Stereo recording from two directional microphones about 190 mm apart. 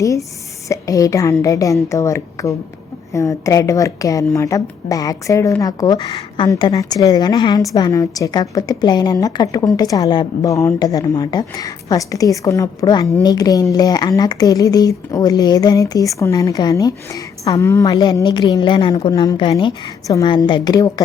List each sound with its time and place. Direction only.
0.0 s a woman's voice: 15° left (ahead or behind)